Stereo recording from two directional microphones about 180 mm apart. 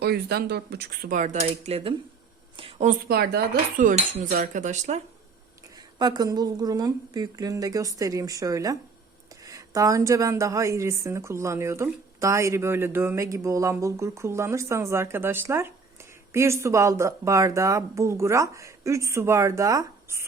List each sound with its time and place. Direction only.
0.0 s cutlery: 60° right (ahead or behind); by 1.9 s 30° right (ahead or behind)
2.6 s a sound: 30° right (ahead or behind)
2.8 s cutlery: 60° right (ahead or behind); by 5.0 s 40° right (ahead or behind)
5.7 s a woman's voice: 20° right (ahead or behind)